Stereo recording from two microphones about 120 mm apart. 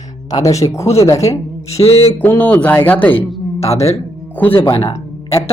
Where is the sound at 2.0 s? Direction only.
15° left (ahead or behind).